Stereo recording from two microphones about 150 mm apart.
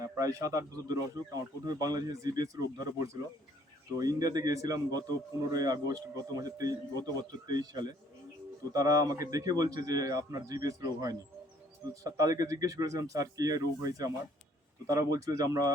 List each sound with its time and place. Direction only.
0.0 s speech: 25° right (ahead or behind)